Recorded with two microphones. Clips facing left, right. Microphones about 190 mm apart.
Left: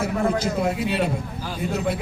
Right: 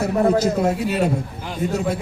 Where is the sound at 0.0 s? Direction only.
40° right (ahead or behind).